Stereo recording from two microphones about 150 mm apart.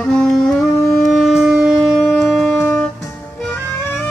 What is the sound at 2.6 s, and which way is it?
Music, 15° left (ahead or behind).